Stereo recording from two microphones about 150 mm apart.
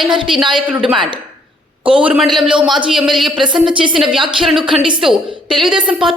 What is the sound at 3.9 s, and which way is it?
A woman's voice, centre (ahead or behind).